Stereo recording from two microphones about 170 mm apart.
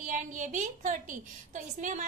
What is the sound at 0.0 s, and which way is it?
A woman's voice, 50° right (ahead or behind).